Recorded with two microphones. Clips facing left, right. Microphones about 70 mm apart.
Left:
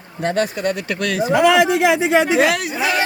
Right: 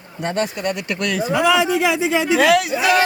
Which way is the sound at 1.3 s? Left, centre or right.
Left.